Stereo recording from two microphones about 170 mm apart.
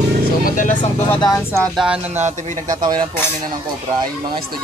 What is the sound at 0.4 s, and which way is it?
Vehicle, 50° left (ahead or behind).